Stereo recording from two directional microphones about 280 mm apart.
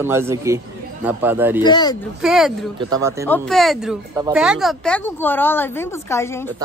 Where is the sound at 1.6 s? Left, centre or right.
Centre.